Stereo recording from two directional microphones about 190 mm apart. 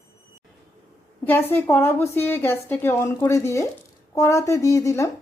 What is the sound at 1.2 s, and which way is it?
A woman's voice, 10° left (ahead or behind).